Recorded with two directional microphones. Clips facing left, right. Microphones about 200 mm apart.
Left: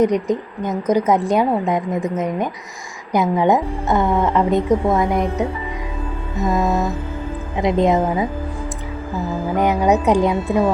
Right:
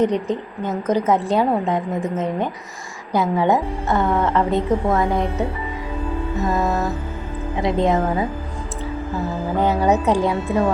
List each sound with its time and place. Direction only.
0.0 s a woman's voice: 15° left (ahead or behind)
6.5 s a woman's voice: 15° left (ahead or behind)
9.6 s a woman's voice: 15° left (ahead or behind)